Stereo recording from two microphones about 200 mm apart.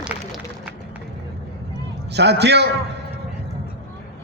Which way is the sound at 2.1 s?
55° right (ahead or behind).